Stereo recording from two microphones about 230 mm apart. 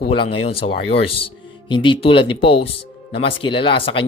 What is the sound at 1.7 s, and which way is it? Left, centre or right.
Speech, left.